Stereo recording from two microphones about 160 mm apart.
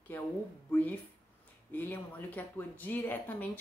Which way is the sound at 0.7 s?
10° left (ahead or behind).